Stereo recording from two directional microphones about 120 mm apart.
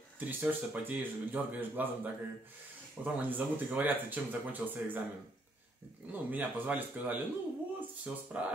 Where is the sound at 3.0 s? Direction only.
10° right (ahead or behind).